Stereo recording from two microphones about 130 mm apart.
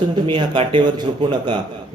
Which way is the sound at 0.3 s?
40° right (ahead or behind).